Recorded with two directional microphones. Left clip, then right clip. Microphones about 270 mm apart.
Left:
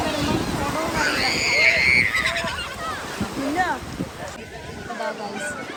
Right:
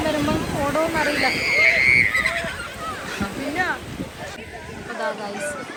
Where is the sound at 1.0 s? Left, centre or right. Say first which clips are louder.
Right 1 dB; left.